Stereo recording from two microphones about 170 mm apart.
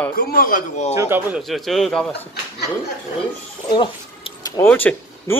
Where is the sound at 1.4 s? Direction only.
Centre (ahead or behind).